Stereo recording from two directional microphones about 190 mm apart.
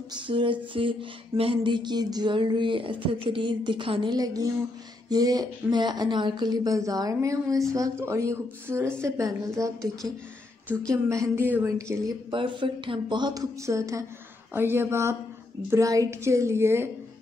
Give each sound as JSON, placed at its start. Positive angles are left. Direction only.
{"t": 0.1, "sound": "music", "side_deg": -25}
{"t": 9.0, "sound": "a woman's voice", "side_deg": -15}
{"t": 12.3, "sound": "music", "side_deg": -25}
{"t": 14.5, "sound": "a woman's voice", "side_deg": -10}